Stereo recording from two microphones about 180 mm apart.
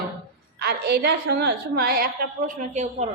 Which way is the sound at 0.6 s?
65° right (ahead or behind).